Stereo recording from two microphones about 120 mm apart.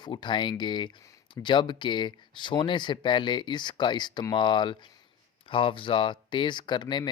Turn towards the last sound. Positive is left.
turn(degrees=40)  # may be behind; listen again after turning